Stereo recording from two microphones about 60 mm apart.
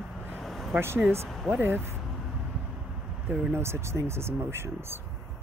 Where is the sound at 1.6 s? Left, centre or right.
Right.